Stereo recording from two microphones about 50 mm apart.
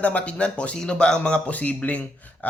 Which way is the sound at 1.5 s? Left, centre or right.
Left.